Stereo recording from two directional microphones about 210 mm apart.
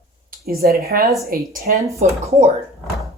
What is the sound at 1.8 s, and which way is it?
Speech, 15° right (ahead or behind).